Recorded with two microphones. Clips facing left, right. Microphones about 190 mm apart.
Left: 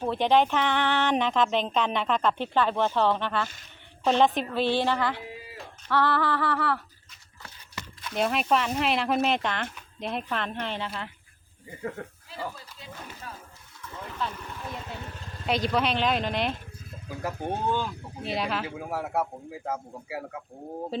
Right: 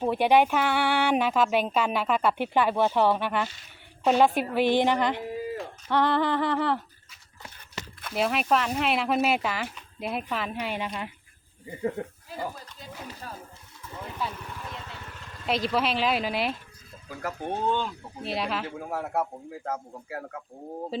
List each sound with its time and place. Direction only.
0.0 s speech: 10° right (ahead or behind)
5.2 s a sound: 45° right (ahead or behind)
5.9 s humming: 20° right (ahead or behind)
8.1 s speech: centre (ahead or behind); by 12.5 s 20° right (ahead or behind)
14.1 s speech: 10° right (ahead or behind)
15.4 s speech: centre (ahead or behind)
17.2 s speech: 5° left (ahead or behind)